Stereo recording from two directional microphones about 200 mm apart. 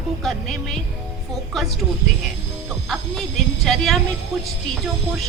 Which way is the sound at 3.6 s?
Centre (ahead or behind).